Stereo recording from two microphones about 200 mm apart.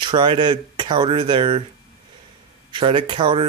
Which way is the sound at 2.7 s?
25° right (ahead or behind).